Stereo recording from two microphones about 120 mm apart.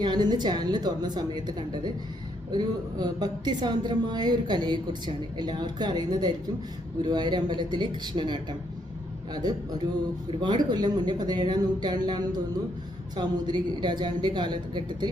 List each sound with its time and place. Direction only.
0.0 s a woman's voice: 40° right (ahead or behind)